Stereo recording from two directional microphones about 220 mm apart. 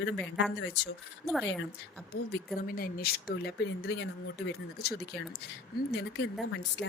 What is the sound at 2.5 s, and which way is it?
A woman's voice, 40° left (ahead or behind).